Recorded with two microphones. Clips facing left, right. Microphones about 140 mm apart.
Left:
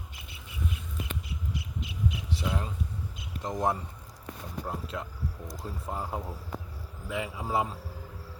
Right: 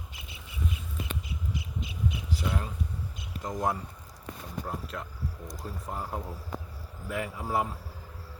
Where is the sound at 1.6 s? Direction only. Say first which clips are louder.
Even; 85° left.